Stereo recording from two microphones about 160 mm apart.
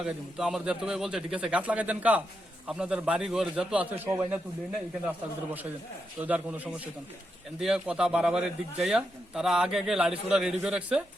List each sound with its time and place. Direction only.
0.0 s a man's voice: 5° right (ahead or behind)
6.1 s a man's voice: 10° right (ahead or behind)